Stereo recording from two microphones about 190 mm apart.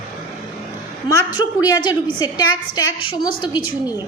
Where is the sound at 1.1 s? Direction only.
20° left (ahead or behind).